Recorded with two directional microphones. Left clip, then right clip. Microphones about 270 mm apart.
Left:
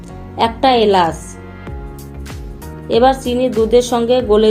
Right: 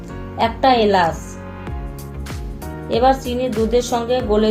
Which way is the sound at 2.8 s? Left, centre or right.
Left.